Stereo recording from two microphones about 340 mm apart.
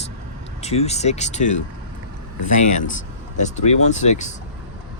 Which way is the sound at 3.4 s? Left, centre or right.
Centre.